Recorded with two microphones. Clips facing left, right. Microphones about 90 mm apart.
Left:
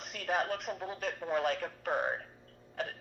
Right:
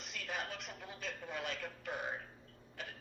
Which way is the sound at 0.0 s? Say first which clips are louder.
Left 10 dB; 50° left (ahead or behind).